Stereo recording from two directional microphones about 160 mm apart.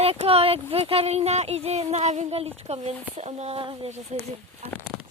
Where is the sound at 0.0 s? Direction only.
40° right (ahead or behind).